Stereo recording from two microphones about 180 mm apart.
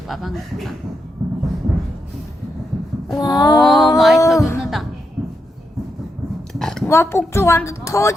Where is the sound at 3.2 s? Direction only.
20° left (ahead or behind).